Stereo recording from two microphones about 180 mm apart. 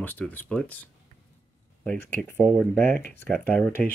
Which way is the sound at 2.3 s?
5° left (ahead or behind).